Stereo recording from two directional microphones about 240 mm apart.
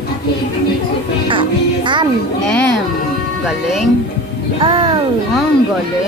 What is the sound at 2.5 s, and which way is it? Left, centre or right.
Speech, centre.